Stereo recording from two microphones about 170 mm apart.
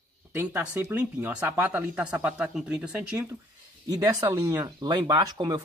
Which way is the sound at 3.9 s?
20° right (ahead or behind).